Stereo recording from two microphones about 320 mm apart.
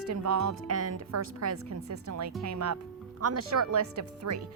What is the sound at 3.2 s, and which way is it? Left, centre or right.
Speech, right.